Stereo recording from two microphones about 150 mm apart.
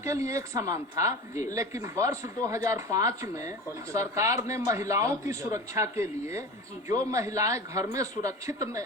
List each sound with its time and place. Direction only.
0.0 s a woman's voice: 20° right (ahead or behind)